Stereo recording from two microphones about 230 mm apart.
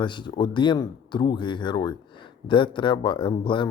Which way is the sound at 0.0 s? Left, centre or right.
Centre.